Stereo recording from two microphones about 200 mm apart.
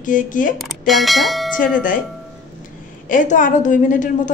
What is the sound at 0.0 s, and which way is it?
Speech, 40° left (ahead or behind).